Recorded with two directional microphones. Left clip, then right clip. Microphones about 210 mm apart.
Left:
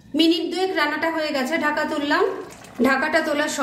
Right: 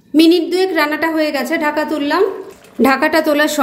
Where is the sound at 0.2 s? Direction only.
35° right (ahead or behind).